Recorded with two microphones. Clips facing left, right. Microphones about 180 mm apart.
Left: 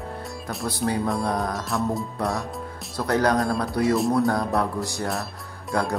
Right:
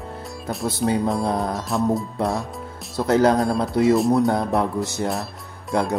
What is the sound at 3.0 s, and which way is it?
Speech, 25° right (ahead or behind).